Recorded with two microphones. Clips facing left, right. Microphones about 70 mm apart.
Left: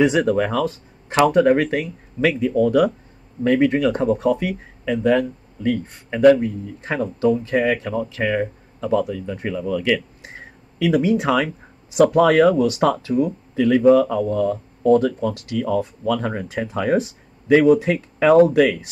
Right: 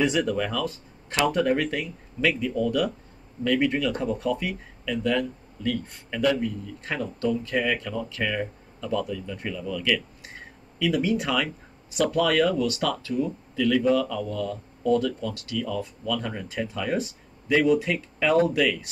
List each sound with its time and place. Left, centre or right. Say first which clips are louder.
0.1 s speech: left 7 dB; left
4.5 s speech: left 7 dB; left
5.6 s speech: left 6 dB; left
6.0 s speech: left 11 dB; left
6.4 s speech: left 5 dB; left
7.2 s speech: left 7 dB; left
10.9 s speech: left 7 dB; left
12.0 s speech: left 9 dB; left
12.4 s speech: left 8 dB; left
12.7 s speech: left 9 dB; left
13.6 s speech: left 8 dB; left